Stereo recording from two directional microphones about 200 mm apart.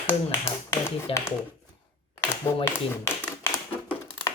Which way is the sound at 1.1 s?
30° left (ahead or behind).